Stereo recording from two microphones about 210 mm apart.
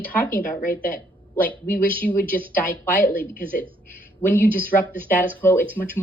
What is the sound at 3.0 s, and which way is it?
Speech, 40° left (ahead or behind).